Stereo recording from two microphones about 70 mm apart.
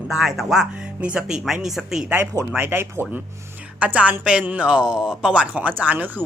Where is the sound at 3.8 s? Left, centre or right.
Right.